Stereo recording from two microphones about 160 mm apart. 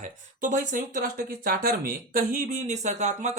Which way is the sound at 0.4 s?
55° right (ahead or behind).